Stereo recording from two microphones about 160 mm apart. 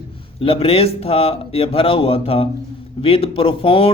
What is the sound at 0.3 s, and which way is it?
Speech, 35° left (ahead or behind).